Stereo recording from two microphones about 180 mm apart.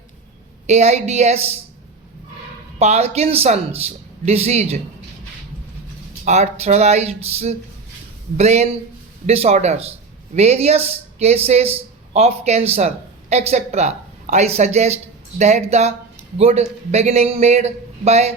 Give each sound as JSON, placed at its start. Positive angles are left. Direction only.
{"t": 0.7, "sound": "speech", "side_deg": -40}
{"t": 2.7, "sound": "speech", "side_deg": -40}
{"t": 6.2, "sound": "speech", "side_deg": -40}